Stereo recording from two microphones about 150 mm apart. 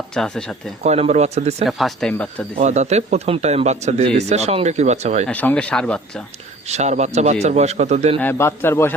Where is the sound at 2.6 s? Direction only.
50° right (ahead or behind).